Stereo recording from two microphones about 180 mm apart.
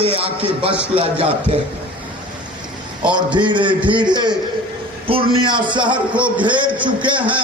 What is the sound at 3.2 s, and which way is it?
A man's voice, 25° right (ahead or behind).